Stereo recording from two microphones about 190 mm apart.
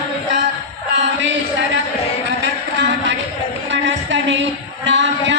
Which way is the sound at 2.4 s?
70° right (ahead or behind).